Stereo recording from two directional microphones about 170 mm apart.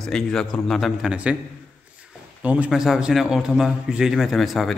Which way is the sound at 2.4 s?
5° right (ahead or behind).